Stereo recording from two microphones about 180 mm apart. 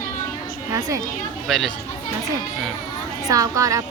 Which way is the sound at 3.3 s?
20° right (ahead or behind).